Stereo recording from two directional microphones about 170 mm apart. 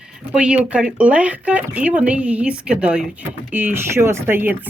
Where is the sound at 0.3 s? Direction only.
5° right (ahead or behind).